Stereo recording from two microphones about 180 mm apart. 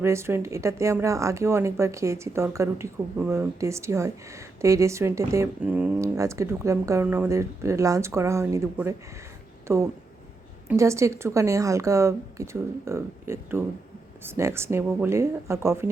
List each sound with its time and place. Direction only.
0.0 s speech: 15° right (ahead or behind)